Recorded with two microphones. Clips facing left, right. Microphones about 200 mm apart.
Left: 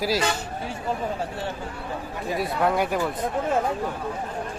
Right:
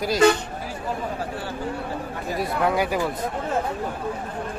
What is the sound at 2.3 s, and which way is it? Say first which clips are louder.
Speech: right 1 dB; centre (ahead or behind).